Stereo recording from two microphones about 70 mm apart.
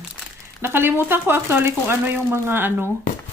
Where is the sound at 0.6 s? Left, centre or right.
Right.